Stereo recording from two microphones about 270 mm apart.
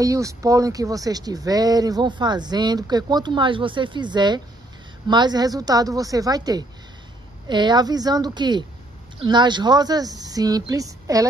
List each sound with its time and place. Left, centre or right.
0.0 s speech: centre